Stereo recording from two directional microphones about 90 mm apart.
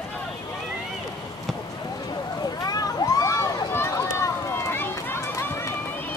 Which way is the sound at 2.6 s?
45° left (ahead or behind).